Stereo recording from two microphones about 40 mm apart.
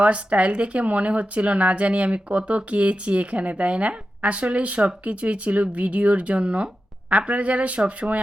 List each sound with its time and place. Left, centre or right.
0.0 s speech: right